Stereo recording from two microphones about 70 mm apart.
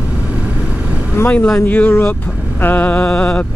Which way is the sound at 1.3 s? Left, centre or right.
Centre.